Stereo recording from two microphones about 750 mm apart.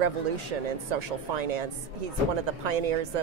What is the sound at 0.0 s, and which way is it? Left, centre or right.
Speech, right.